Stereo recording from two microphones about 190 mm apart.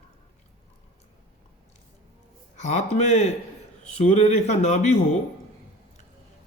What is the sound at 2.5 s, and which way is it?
A man's voice, 40° left (ahead or behind).